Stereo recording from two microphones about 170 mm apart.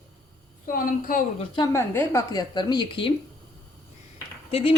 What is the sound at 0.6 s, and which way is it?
Speech, 55° left (ahead or behind).